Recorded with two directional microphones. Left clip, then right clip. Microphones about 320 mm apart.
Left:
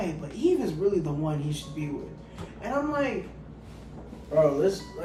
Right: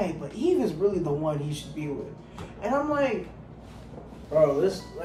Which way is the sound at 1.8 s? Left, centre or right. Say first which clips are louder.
Right 4 dB; centre.